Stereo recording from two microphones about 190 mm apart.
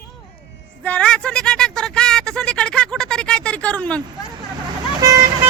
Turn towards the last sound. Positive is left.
turn(degrees=-20)  # may be behind; listen again after turning